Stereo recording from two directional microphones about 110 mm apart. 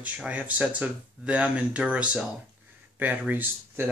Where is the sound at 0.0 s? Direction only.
15° right (ahead or behind).